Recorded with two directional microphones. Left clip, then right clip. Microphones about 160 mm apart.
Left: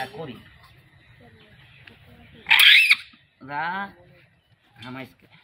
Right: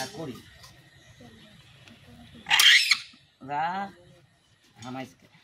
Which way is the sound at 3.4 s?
Centre (ahead or behind).